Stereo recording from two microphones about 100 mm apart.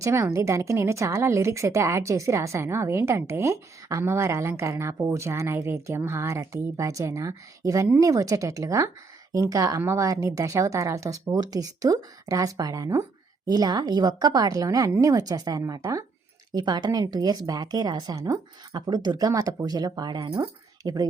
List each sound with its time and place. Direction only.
0.0 s a woman's voice: 30° right (ahead or behind)